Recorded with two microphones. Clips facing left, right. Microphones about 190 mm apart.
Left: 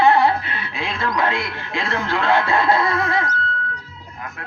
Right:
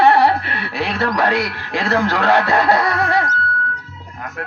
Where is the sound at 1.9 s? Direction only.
70° right (ahead or behind).